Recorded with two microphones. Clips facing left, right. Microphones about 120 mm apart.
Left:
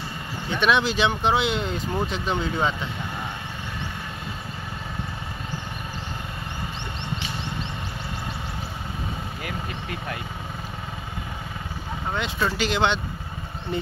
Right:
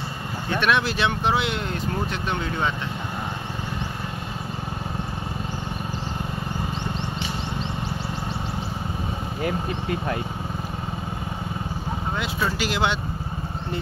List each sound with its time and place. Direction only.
0.5 s speech: centre (ahead or behind)
9.4 s speech: 30° right (ahead or behind)
12.2 s speech: 5° right (ahead or behind)